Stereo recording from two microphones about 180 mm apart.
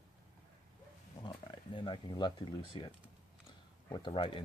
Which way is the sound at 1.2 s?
25° left (ahead or behind).